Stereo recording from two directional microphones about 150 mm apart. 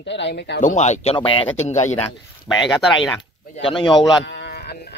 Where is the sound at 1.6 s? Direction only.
50° left (ahead or behind).